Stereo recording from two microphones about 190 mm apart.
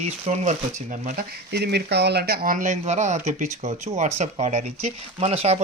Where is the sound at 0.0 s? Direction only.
35° right (ahead or behind).